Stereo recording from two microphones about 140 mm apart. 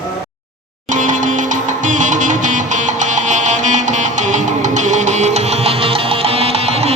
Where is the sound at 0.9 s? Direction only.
65° right (ahead or behind).